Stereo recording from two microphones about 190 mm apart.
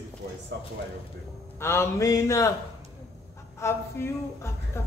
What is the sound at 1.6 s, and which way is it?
Speech, 10° left (ahead or behind).